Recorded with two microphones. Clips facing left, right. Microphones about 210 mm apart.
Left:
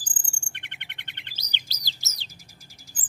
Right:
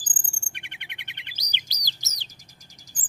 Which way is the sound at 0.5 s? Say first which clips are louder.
Right 1 dB; 10° right (ahead or behind).